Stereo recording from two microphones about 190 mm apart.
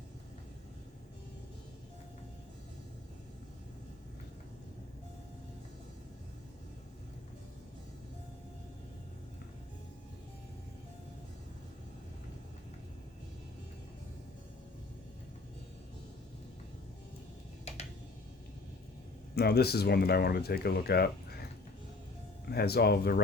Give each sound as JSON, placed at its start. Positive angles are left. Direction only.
{"t": 19.4, "sound": "speech", "side_deg": 55}
{"t": 22.4, "sound": "speech", "side_deg": 55}